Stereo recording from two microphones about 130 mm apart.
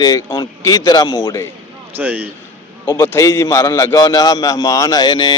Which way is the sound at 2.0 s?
15° right (ahead or behind).